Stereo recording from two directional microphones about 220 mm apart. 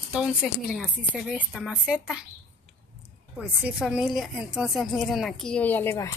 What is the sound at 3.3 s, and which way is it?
A woman's voice, 5° right (ahead or behind).